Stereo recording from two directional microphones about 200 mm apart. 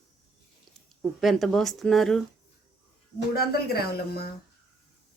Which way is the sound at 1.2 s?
Centre (ahead or behind).